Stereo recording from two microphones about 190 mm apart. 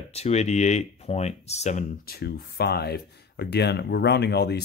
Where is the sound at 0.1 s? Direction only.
35° left (ahead or behind).